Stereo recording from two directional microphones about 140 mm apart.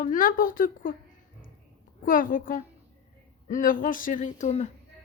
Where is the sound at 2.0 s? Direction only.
80° left; by 4.7 s 55° left (ahead or behind).